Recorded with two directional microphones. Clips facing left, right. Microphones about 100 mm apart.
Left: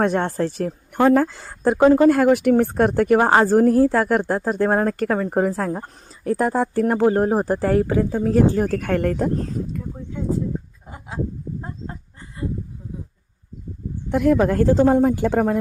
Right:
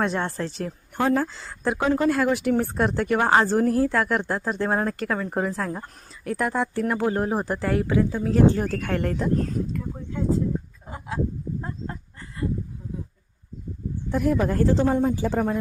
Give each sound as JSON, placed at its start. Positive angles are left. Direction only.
{"t": 0.0, "sound": "a woman's voice", "side_deg": 50}
{"t": 14.1, "sound": "a woman's voice", "side_deg": 75}